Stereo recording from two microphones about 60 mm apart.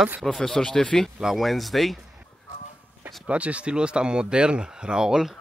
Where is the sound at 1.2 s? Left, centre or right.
Centre.